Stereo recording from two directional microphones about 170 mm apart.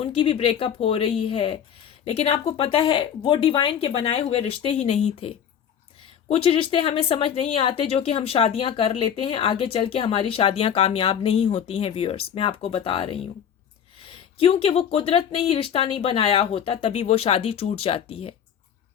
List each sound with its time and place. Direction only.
0.0 s speech: 35° left (ahead or behind)